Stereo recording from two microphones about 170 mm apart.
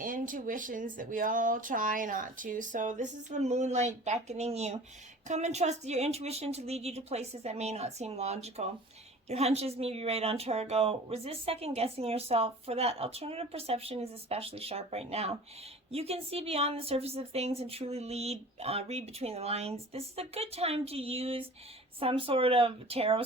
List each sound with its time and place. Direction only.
0.0 s speech: 55° right (ahead or behind); by 23.2 s 35° right (ahead or behind)